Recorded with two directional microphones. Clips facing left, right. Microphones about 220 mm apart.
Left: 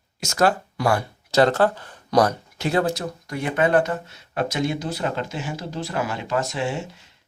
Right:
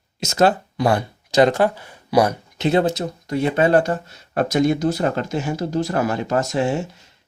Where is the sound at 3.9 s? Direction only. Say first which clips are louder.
Right 4 dB; 45° right (ahead or behind).